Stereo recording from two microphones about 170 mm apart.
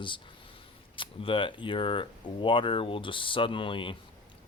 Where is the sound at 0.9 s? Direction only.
30° left (ahead or behind).